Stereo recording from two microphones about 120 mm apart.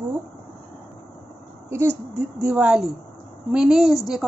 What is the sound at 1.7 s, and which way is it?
A woman's voice, 20° right (ahead or behind).